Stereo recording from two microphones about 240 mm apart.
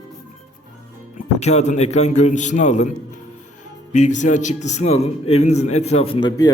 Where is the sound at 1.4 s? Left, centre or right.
Left.